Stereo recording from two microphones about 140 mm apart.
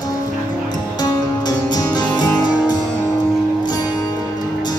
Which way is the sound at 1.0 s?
30° left (ahead or behind).